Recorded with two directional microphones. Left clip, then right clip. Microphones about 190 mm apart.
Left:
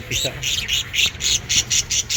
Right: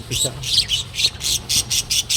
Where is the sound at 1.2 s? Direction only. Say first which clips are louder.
Left 1 dB; 55° right (ahead or behind).